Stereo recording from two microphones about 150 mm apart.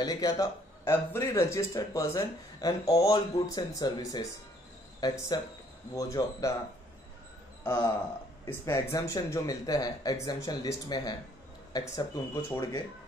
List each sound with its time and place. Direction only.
0.0 s speech: 25° left (ahead or behind)
7.6 s speech: 20° left (ahead or behind)